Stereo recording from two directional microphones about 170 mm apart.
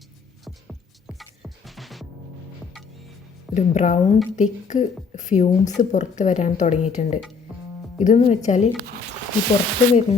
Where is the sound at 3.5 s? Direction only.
45° left (ahead or behind).